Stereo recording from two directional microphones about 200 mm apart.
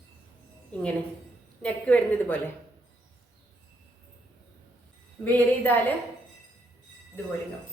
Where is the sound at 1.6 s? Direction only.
5° left (ahead or behind).